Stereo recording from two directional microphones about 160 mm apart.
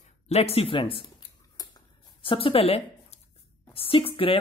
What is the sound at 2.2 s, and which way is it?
Speech, 35° left (ahead or behind).